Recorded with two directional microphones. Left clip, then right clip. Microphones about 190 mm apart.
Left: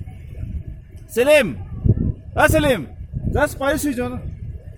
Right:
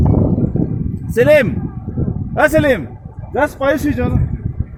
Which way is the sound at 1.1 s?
10° left (ahead or behind).